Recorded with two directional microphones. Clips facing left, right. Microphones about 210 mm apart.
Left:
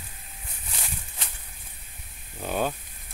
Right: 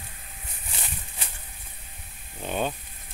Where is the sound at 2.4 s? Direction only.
5° left (ahead or behind).